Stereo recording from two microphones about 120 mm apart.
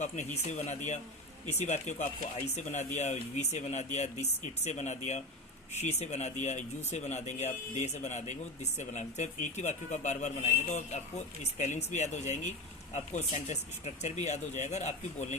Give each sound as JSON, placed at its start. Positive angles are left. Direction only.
{"t": 0.0, "sound": "speech", "side_deg": 75}
{"t": 11.4, "sound": "speech", "side_deg": 85}